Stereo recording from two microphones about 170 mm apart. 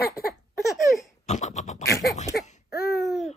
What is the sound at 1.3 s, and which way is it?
Scratch, 45° left (ahead or behind).